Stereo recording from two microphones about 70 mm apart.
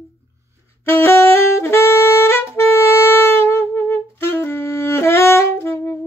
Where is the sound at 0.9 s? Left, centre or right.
Left.